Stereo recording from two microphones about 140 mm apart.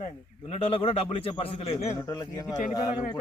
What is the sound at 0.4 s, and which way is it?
A man's voice, 45° left (ahead or behind).